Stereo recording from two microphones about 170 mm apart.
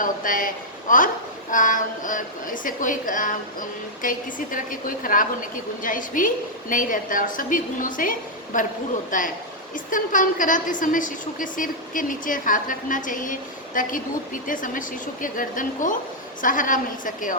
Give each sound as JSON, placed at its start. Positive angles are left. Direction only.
{"t": 0.0, "sound": "a woman's voice", "side_deg": 55}